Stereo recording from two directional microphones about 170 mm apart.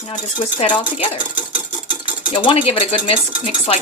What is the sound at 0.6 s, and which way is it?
Speech, 40° left (ahead or behind).